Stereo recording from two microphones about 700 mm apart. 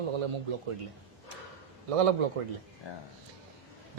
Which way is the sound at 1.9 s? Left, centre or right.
Right.